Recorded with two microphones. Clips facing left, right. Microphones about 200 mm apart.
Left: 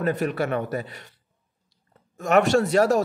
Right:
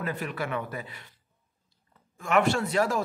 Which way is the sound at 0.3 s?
45° left (ahead or behind).